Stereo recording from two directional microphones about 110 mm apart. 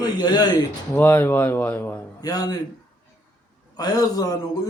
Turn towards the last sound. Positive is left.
turn(degrees=35)  # may be behind; listen again after turning